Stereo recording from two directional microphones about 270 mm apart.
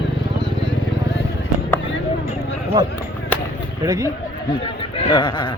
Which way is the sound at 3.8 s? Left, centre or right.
Centre.